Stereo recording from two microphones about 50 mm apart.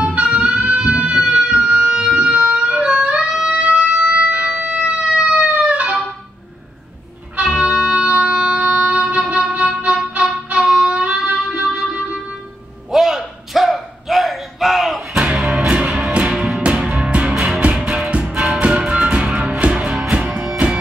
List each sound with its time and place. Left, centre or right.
0.0 s music: centre
3.2 s music: centre
3.4 s music: right
5.0 s guitar: centre
7.3 s music: right
12.9 s a sound: centre
15.1 s music: centre